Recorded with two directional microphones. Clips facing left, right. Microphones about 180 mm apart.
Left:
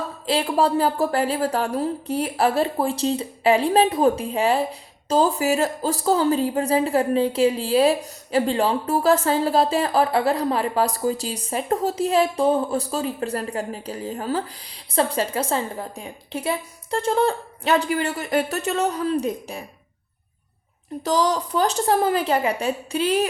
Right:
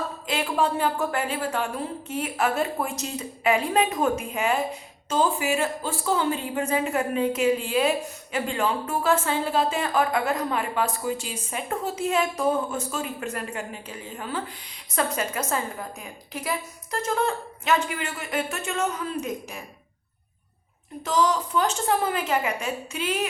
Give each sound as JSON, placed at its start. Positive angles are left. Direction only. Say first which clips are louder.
{"t": 0.3, "sound": "a woman's voice", "louder": "left 5 dB", "side_deg": 35}
{"t": 21.0, "sound": "a woman's voice", "louder": "left 2 dB", "side_deg": 35}